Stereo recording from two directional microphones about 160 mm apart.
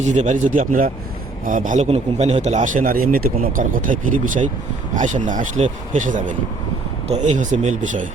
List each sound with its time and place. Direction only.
0.0 s speech: 50° right (ahead or behind)